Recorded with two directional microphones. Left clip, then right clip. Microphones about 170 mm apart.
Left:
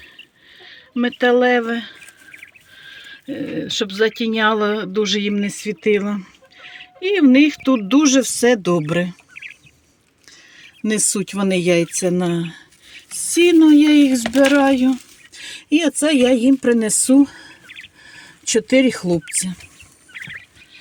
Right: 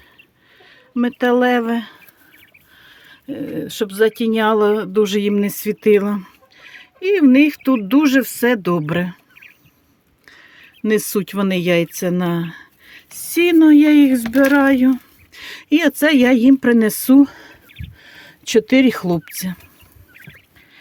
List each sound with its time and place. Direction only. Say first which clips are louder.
0.6 s speech: even; 10° right (ahead or behind)
2.7 s speech: left 7 dB; centre (ahead or behind)
10.8 s speech: right 3 dB; 5° right (ahead or behind)
14.8 s a sound: right 2 dB; 20° right (ahead or behind)
16.3 s speech: right 2 dB; 20° right (ahead or behind)
18.0 s a sound: left 2 dB; 10° right (ahead or behind)
18.7 s speech: even; 10° right (ahead or behind)